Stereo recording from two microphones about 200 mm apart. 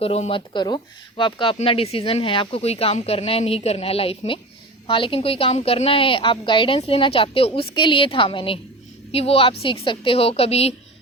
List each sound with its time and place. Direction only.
0.0 s speech: 30° left (ahead or behind)